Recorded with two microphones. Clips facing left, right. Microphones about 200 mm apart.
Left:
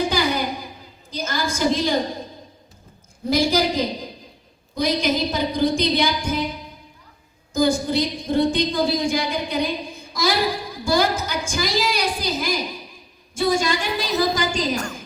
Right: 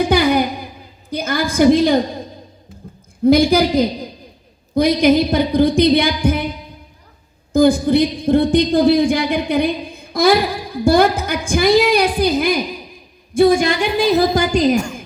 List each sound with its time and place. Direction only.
0.1 s a sound: 55° right (ahead or behind)
3.2 s a woman's voice: 60° right (ahead or behind)
7.5 s a woman's voice: 55° right (ahead or behind)